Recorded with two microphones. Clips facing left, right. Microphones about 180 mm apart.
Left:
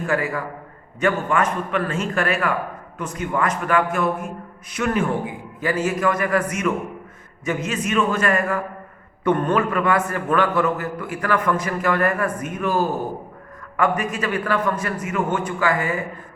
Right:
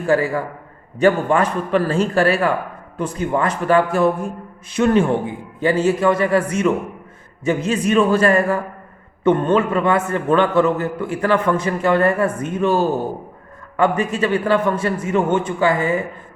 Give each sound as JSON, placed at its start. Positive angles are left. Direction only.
{"t": 0.0, "sound": "a man's voice", "side_deg": -30}